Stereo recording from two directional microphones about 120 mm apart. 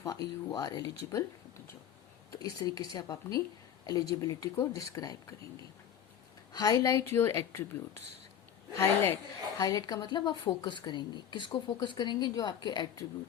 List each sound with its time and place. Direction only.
0.0 s a woman's voice: 35° left (ahead or behind)
2.4 s a woman's voice: 30° left (ahead or behind)
6.5 s speech: 30° left (ahead or behind)
8.7 s speech: 20° left (ahead or behind)
9.6 s a woman's voice: 30° left (ahead or behind)